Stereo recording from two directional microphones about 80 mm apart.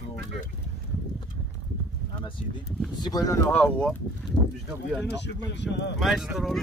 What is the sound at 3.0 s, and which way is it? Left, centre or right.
Speech, left.